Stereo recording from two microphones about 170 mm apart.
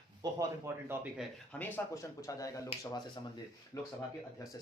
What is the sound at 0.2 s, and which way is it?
Speech, 25° right (ahead or behind).